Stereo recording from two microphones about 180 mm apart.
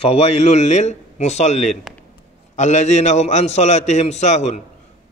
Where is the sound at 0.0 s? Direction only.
35° left (ahead or behind).